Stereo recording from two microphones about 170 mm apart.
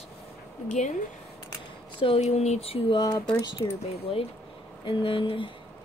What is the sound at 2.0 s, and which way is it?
Speech, 35° left (ahead or behind).